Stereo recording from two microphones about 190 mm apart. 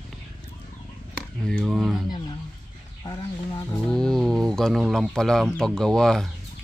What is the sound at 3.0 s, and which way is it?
Chicken, 20° left (ahead or behind).